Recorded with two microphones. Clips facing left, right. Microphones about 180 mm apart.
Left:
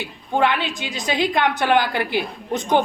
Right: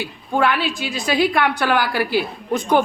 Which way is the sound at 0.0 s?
20° left (ahead or behind).